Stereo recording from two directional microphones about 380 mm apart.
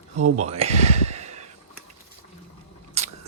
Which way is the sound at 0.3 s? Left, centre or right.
Centre.